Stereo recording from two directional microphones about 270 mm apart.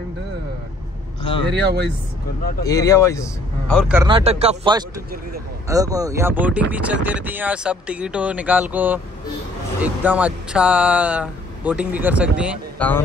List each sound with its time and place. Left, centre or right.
1.5 s speech: right
2.6 s speech: centre
3.9 s speech: centre
4.2 s speech: right; by 12.8 s centre